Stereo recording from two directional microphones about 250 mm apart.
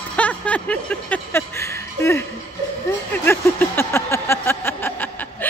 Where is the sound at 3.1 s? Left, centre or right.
Centre.